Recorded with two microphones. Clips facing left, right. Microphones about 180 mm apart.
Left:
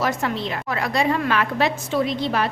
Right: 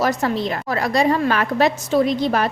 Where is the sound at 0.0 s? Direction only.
40° right (ahead or behind).